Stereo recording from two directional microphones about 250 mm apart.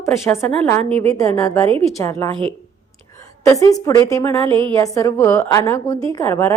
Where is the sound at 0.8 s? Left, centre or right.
Right.